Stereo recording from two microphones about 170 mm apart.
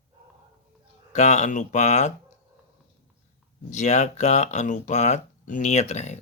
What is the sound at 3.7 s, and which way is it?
Speech, 45° left (ahead or behind).